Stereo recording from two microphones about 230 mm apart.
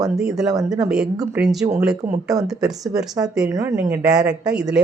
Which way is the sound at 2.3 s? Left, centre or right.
Centre.